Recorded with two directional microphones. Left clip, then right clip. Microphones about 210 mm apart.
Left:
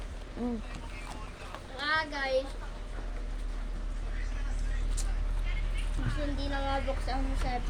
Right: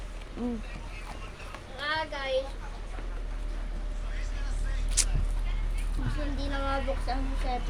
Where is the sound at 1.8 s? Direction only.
30° left (ahead or behind).